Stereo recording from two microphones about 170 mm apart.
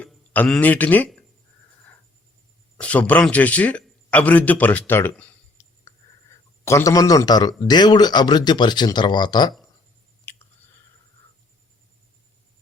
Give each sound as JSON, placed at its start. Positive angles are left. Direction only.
{"t": 0.0, "sound": "speech", "side_deg": 5}
{"t": 2.7, "sound": "speech", "side_deg": 5}
{"t": 10.3, "sound": "a sound", "side_deg": 15}